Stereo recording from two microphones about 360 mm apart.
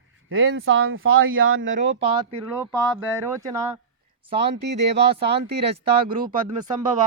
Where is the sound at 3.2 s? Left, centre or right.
Centre.